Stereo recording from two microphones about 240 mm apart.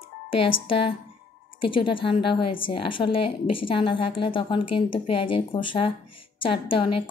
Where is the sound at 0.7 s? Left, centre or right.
Left.